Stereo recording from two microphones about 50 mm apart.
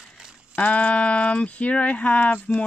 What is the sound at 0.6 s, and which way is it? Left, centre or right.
Speech, left.